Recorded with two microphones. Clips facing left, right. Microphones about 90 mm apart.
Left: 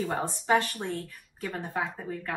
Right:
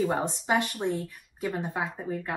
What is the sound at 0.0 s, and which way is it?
A woman's voice, 20° right (ahead or behind).